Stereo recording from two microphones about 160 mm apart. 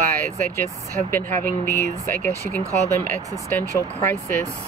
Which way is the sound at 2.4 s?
20° right (ahead or behind).